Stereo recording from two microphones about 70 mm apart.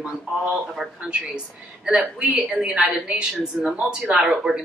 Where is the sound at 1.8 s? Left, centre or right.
Centre.